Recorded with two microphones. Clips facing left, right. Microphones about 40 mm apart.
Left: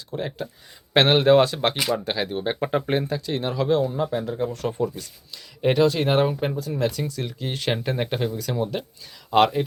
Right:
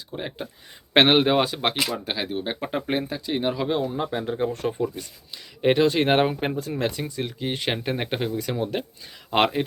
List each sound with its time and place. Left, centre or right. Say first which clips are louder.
0.2 s speech: left 3 dB; centre
5.9 s speech: right 1 dB; right
7.0 s speech: even; centre